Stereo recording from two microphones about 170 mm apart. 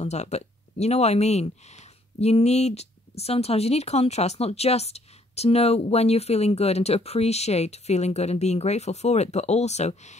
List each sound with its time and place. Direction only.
0.0 s speech: 40° left (ahead or behind)